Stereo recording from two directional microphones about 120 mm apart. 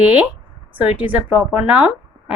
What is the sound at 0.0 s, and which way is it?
A woman's voice, 10° right (ahead or behind).